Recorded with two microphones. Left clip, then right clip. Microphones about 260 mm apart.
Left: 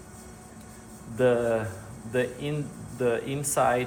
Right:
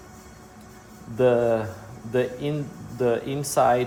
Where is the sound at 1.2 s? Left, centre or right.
Right.